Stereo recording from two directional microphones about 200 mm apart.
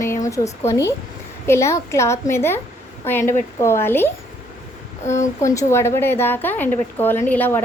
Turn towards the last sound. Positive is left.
turn(degrees=10)  # may be behind; listen again after turning